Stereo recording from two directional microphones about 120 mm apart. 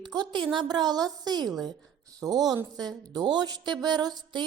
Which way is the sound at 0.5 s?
40° right (ahead or behind).